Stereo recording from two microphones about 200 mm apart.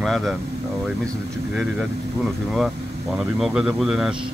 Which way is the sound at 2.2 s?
Centre (ahead or behind).